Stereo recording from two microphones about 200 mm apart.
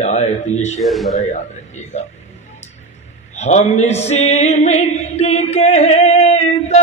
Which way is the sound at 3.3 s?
35° left (ahead or behind).